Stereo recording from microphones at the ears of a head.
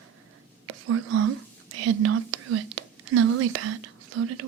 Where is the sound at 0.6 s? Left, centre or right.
Right.